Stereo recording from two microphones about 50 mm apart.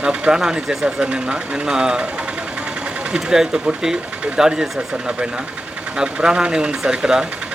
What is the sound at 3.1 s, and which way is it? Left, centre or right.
Speech, centre.